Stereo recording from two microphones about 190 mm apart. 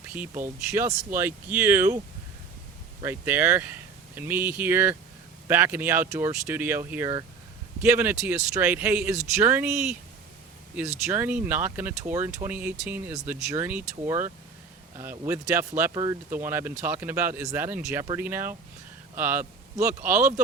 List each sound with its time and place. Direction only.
0.1 s speech: 10° right (ahead or behind)
3.0 s speech: 10° right (ahead or behind)
11.0 s speech: 10° right (ahead or behind)